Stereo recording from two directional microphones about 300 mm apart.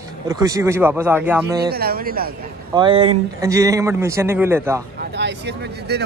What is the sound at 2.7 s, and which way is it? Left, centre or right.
A man's voice, centre.